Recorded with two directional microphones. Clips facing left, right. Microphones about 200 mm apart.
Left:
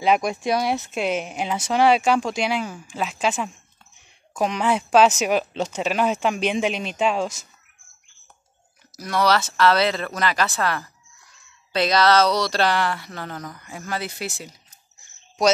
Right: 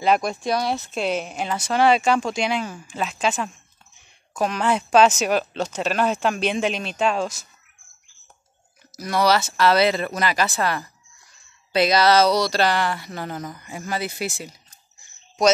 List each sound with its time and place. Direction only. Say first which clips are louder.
0.0 s speech: even; 10° left (ahead or behind)
0.9 s speech: even; 5° left (ahead or behind)
8.9 s speech: right 1 dB; 5° right (ahead or behind)